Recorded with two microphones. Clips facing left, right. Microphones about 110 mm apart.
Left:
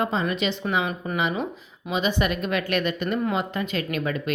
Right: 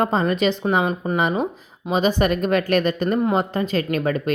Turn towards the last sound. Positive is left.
turn(degrees=-40)  # may be behind; listen again after turning